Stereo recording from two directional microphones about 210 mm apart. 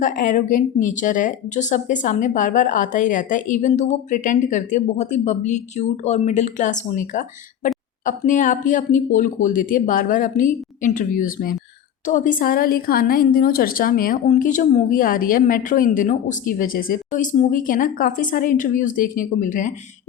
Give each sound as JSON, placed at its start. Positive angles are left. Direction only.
{"t": 0.0, "sound": "speech", "side_deg": 40}